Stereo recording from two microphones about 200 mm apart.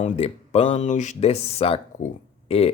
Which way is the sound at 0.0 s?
35° left (ahead or behind).